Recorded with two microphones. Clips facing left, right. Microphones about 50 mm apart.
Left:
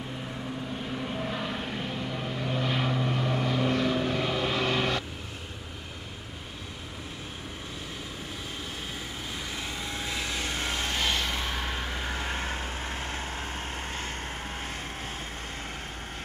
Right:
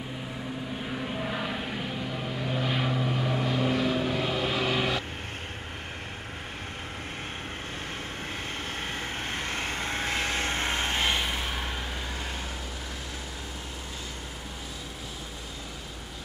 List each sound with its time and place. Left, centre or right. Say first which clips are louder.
0.9 s vehicle: right 1 dB; centre
9.3 s vehicle: right 3 dB; right; by 11.4 s centre
12.1 s vehicle: left 4 dB; left